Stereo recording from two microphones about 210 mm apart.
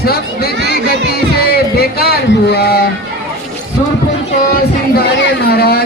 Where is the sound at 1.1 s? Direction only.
50° left (ahead or behind).